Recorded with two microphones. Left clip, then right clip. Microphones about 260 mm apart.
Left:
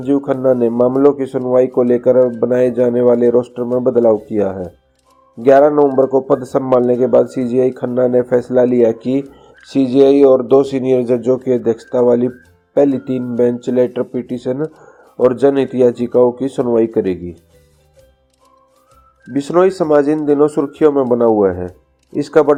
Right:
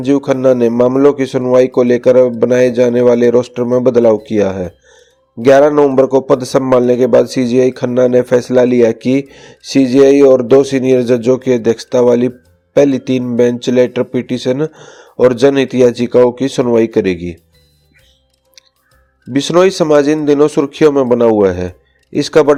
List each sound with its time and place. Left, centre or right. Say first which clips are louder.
0.0 s a man's voice: right 3 dB; right
19.3 s a man's voice: right 3 dB; right